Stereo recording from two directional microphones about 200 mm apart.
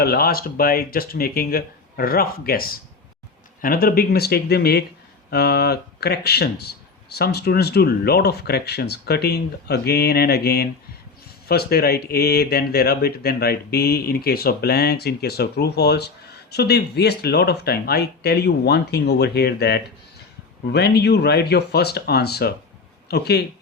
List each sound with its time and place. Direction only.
0.0 s speech: 50° left (ahead or behind)